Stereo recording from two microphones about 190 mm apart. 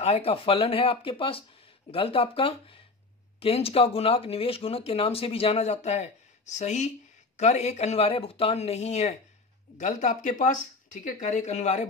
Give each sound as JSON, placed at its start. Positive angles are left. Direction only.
{"t": 0.0, "sound": "speech", "side_deg": 30}